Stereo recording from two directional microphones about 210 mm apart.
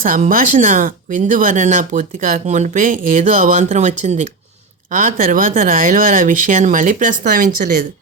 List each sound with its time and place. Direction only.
0.0 s speech: 40° right (ahead or behind)